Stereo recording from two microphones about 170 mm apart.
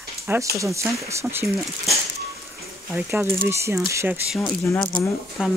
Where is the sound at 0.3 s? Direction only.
20° right (ahead or behind).